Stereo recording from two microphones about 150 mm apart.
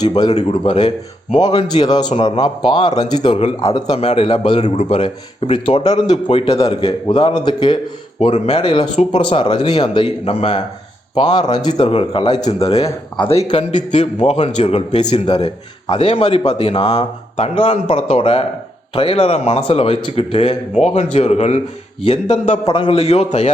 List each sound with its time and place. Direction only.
0.0 s a man's voice: 30° left (ahead or behind)
0.3 s speech: 40° left (ahead or behind)
1.6 s a man's voice: 30° left (ahead or behind)
5.8 s a man's voice: 50° left (ahead or behind)
6.2 s speech: 35° left (ahead or behind)
8.2 s speech: 45° left (ahead or behind)
11.2 s a man's voice: 30° left (ahead or behind)
16.8 s a man's voice: 30° left (ahead or behind); by 23.5 s 45° left (ahead or behind)